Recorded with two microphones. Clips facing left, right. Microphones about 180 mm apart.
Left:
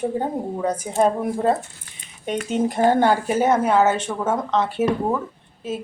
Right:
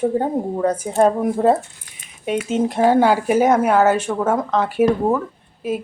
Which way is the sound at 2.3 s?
5° right (ahead or behind).